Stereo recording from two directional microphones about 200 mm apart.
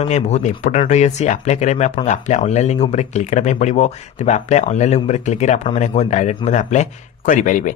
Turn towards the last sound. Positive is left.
turn(degrees=40)  # may be behind; listen again after turning